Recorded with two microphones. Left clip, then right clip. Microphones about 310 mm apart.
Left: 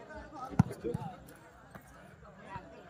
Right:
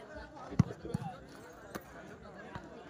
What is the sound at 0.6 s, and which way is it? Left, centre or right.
Basketball bounce, centre.